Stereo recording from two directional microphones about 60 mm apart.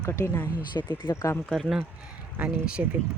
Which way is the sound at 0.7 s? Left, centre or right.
Left.